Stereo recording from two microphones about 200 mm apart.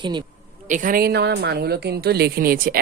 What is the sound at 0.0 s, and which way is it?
Speech, 20° right (ahead or behind).